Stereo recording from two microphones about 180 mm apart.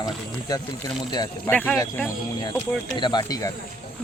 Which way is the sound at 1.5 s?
10° left (ahead or behind).